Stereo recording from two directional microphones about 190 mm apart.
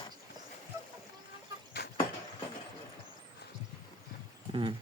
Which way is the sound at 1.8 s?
60° left (ahead or behind).